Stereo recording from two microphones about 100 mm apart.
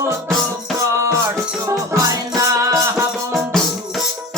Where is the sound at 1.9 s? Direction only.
35° right (ahead or behind).